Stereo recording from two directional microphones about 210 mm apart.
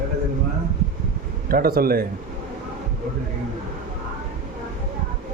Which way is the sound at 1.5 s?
45° right (ahead or behind).